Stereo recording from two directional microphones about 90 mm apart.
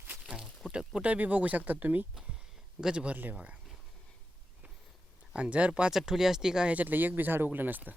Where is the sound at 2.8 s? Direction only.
10° right (ahead or behind).